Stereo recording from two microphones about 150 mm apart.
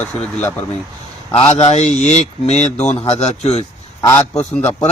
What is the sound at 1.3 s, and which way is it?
A man's voice, 40° left (ahead or behind).